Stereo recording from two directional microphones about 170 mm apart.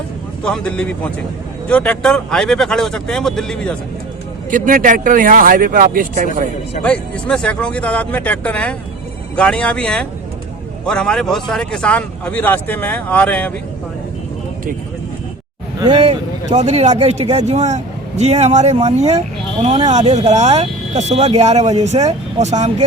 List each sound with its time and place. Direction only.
0.4 s speech: 5° left (ahead or behind)
4.5 s speech: 50° right (ahead or behind)
6.8 s speech: 5° left (ahead or behind)
15.8 s speech: 30° right (ahead or behind)